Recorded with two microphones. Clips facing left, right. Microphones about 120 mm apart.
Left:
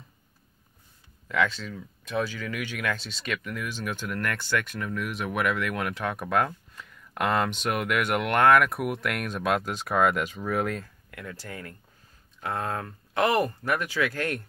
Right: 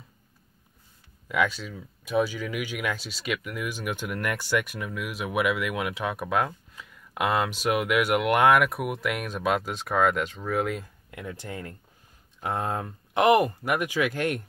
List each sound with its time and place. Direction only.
1.3 s speech: 10° right (ahead or behind)
10.8 s speech: 20° right (ahead or behind)